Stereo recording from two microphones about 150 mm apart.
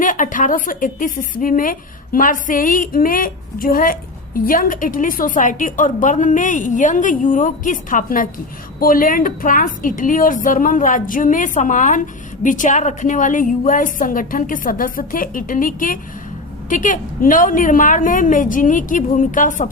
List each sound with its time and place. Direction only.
0.0 s a woman's voice: 60° left (ahead or behind)